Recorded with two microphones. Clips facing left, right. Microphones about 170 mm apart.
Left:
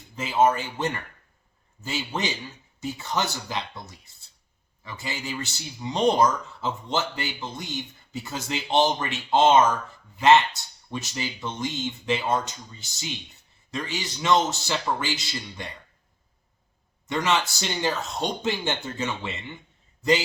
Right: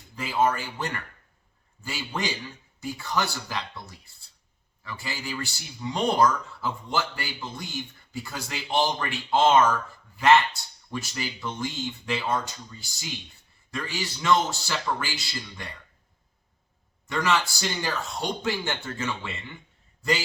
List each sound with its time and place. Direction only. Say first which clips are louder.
0.2 s speech: left 3 dB; 20° left (ahead or behind)
17.1 s speech: left 1 dB; 20° left (ahead or behind)